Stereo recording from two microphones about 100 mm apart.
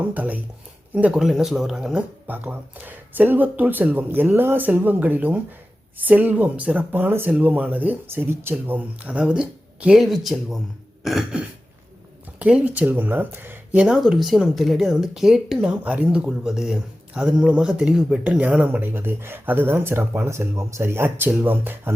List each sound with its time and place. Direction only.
0.0 s speech: 15° right (ahead or behind); by 10.6 s centre (ahead or behind)
11.0 s cough: centre (ahead or behind)
12.4 s speech: 10° right (ahead or behind)
13.7 s speech: 5° right (ahead or behind); by 21.9 s 20° right (ahead or behind)